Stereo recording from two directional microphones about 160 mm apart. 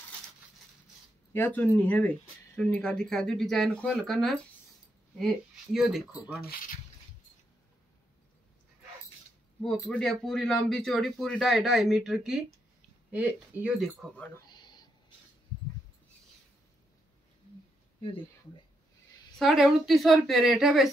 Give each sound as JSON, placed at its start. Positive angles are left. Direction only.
{"t": 1.3, "sound": "speech", "side_deg": 10}
{"t": 9.6, "sound": "speech", "side_deg": 5}
{"t": 14.5, "sound": "a sound", "side_deg": 25}
{"t": 19.3, "sound": "speech", "side_deg": 0}